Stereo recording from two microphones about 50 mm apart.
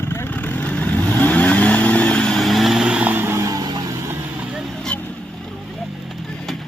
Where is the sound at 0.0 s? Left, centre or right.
Left.